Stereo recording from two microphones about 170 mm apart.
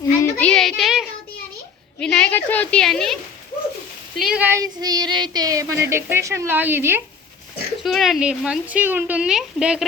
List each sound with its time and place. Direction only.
0.2 s child singing: 5° left (ahead or behind)
2.0 s a woman's voice: 10° left (ahead or behind)
4.2 s speech: 5° right (ahead or behind)
7.9 s speech: centre (ahead or behind)